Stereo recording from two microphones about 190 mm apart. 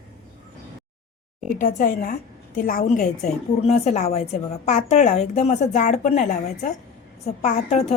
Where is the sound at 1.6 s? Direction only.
45° left (ahead or behind).